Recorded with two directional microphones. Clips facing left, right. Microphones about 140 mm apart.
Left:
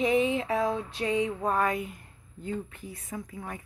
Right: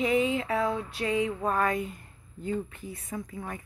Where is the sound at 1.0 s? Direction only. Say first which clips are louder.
Even; 25° left (ahead or behind).